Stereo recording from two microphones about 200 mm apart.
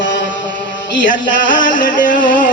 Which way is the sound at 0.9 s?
40° left (ahead or behind).